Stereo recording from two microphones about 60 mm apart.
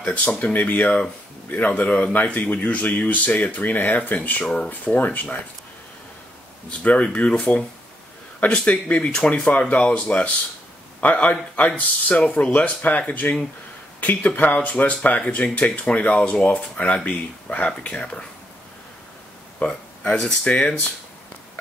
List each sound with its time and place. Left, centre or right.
0.0 s speech: left
6.8 s speech: left
8.6 s speech: left
19.6 s speech: centre